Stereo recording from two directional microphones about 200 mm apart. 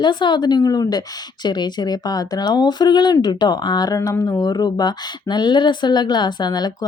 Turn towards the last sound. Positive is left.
turn(degrees=20)  # may be behind; listen again after turning